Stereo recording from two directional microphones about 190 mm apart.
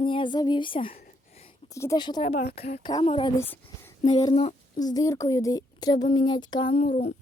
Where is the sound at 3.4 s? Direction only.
10° left (ahead or behind).